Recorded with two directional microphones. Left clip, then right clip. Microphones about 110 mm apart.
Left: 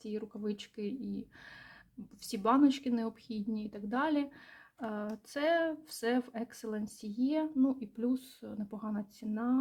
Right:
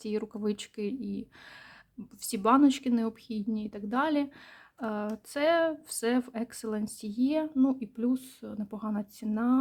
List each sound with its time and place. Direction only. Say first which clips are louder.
0.0 s speech: right 7 dB; 50° right (ahead or behind); by 9.6 s 30° right (ahead or behind)